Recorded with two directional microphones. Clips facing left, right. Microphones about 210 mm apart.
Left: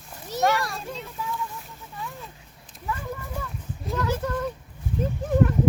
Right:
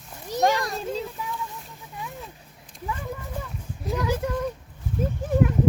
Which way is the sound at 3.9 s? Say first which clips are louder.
Right 1 dB; 10° right (ahead or behind).